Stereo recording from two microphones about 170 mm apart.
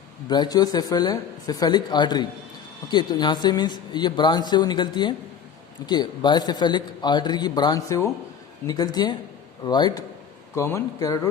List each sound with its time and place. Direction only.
0.3 s a man's voice: 25° left (ahead or behind)